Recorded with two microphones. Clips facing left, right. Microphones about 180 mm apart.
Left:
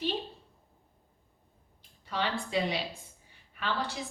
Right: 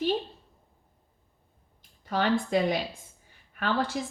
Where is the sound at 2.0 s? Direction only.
45° right (ahead or behind).